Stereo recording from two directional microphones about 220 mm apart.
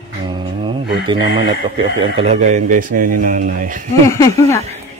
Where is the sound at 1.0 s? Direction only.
20° right (ahead or behind); by 3.8 s 35° right (ahead or behind).